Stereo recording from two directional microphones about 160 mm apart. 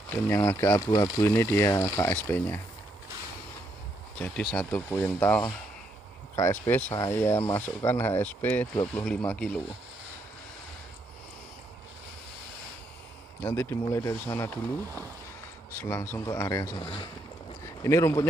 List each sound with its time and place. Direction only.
0.1 s speech: 15° left (ahead or behind)
4.2 s speech: 5° left (ahead or behind)
13.4 s speech: 15° left (ahead or behind)
15.7 s speech: 15° left (ahead or behind)
16.8 s speech: 30° left (ahead or behind)
17.8 s speech: 15° left (ahead or behind)